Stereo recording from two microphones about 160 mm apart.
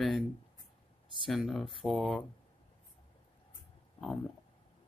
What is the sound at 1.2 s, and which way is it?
Speech, centre (ahead or behind).